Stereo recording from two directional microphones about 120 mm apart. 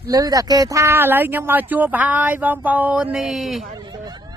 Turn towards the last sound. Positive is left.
turn(degrees=-35)  # may be behind; listen again after turning